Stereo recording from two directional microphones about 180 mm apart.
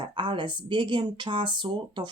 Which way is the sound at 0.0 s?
25° right (ahead or behind).